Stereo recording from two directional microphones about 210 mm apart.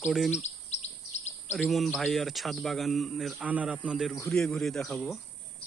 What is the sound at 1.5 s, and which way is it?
Speech, centre (ahead or behind).